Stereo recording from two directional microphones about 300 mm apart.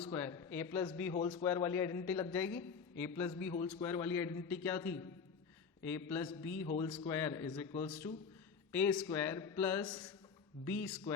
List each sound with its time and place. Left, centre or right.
0.0 s a man's voice: centre
7.9 s a man's voice: centre